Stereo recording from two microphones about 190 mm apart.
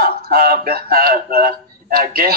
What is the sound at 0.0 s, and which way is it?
A man's voice, 55° right (ahead or behind).